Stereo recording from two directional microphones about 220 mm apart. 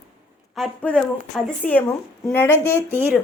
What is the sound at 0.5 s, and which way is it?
A woman's voice, 5° left (ahead or behind).